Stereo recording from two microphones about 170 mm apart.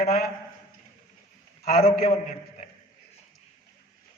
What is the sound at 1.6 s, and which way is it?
A man's voice, 60° left (ahead or behind).